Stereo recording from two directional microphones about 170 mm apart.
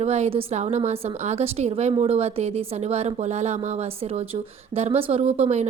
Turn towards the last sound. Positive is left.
turn(degrees=-40)  # may be behind; listen again after turning